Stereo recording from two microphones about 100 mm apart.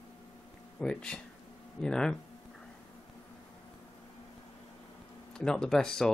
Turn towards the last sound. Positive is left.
turn(degrees=5)  # may be behind; listen again after turning